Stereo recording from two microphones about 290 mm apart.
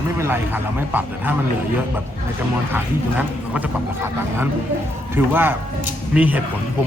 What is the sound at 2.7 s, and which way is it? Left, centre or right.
Speech, centre.